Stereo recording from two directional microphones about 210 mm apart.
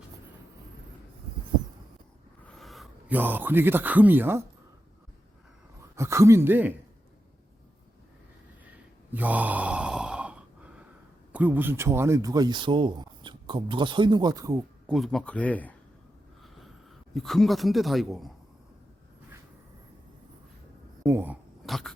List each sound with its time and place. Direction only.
2.4 s a man's voice: centre (ahead or behind)
6.0 s speech: 15° right (ahead or behind)
9.1 s sigh: 5° right (ahead or behind)
11.3 s speech: 10° right (ahead or behind)
14.8 s a man's voice: centre (ahead or behind)
17.2 s a man's voice: centre (ahead or behind)
21.0 s dog: 10° right (ahead or behind)